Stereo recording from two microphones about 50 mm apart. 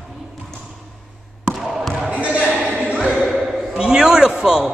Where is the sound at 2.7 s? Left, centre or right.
Right.